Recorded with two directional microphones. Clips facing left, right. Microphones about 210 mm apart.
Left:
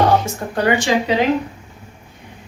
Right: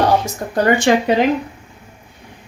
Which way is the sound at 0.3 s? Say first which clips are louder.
Right 2 dB; 45° right (ahead or behind).